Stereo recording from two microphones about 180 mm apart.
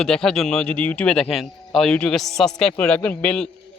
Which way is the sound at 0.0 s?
5° left (ahead or behind).